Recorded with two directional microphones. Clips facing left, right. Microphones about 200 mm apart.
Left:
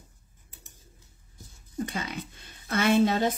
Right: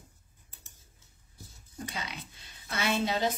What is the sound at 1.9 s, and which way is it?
Speech, 50° left (ahead or behind).